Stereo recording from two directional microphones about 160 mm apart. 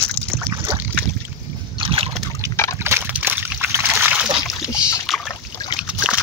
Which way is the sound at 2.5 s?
15° left (ahead or behind).